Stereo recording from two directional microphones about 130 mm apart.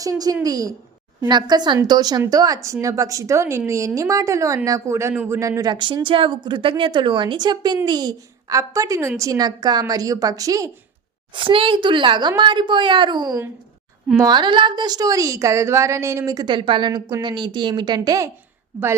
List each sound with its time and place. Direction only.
0.0 s a woman's voice: 30° right (ahead or behind)
11.3 s a woman's voice: 40° right (ahead or behind)